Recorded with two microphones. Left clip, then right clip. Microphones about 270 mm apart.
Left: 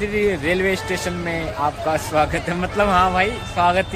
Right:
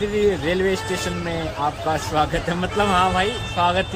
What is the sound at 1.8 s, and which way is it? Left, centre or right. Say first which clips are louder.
Speech: left 2 dB; centre.